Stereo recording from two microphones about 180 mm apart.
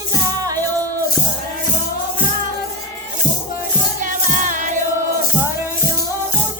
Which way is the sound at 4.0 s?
45° right (ahead or behind).